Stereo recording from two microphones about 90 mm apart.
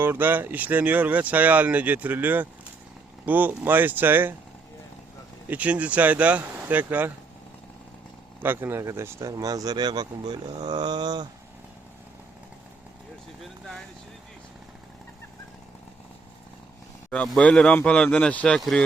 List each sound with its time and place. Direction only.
0.0 s speech: 20° right (ahead or behind)
5.5 s speech: 15° right (ahead or behind)
8.4 s speech: 25° right (ahead or behind); by 11.3 s 50° right (ahead or behind)
17.3 s speech: 10° left (ahead or behind)